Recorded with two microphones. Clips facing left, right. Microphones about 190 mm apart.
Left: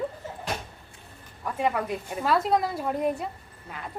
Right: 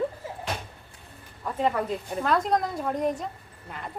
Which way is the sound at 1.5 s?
10° left (ahead or behind).